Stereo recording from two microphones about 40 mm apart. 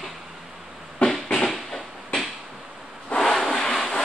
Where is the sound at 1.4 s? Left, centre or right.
Centre.